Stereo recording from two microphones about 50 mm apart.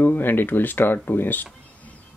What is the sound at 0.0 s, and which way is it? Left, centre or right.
Speech, left.